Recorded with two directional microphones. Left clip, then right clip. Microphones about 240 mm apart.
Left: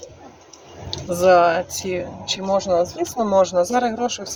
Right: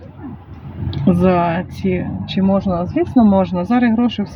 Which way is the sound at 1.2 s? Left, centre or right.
Centre.